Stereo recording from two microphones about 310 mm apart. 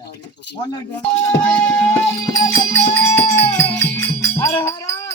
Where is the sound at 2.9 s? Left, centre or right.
Centre.